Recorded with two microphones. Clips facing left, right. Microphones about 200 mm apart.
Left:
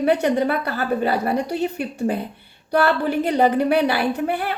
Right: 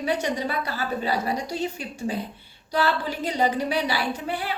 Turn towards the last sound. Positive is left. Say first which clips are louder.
# left 6 dB
turn(degrees=55)  # may be behind; listen again after turning